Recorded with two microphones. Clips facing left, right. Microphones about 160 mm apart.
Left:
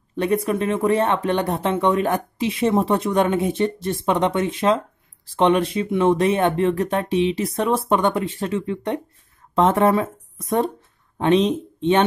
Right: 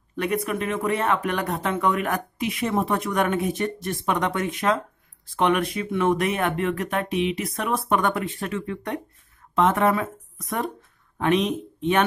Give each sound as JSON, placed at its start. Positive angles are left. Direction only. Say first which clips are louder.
{"t": 0.1, "sound": "speech", "louder": "left 5 dB", "side_deg": 30}